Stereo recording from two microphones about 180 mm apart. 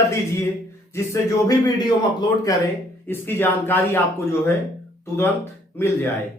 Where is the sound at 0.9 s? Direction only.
15° left (ahead or behind).